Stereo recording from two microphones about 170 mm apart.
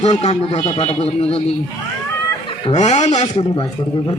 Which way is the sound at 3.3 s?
30° left (ahead or behind).